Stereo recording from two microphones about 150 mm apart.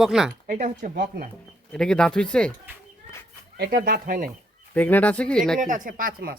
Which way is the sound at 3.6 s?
90° right.